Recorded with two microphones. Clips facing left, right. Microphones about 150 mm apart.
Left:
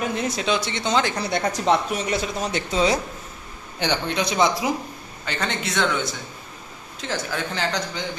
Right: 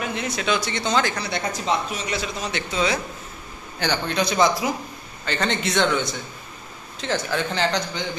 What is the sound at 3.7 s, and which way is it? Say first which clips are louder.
Speech: even; 20° left (ahead or behind).